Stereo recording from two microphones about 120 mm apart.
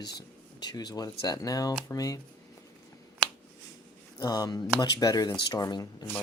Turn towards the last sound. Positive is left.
turn(degrees=35)  # may be behind; listen again after turning